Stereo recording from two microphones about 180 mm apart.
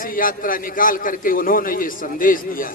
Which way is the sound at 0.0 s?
50° left (ahead or behind).